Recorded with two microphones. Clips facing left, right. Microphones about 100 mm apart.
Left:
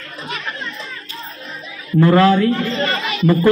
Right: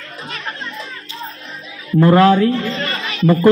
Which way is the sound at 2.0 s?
10° right (ahead or behind).